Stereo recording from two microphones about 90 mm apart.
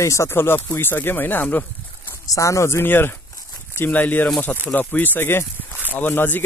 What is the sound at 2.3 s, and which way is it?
Speech, 35° left (ahead or behind).